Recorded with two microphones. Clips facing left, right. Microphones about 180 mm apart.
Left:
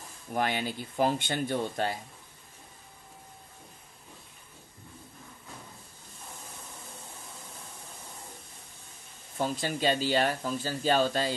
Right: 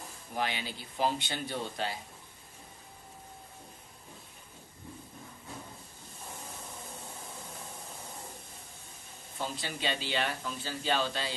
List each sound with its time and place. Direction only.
0.3 s speech: 50° left (ahead or behind)
9.4 s speech: 45° left (ahead or behind)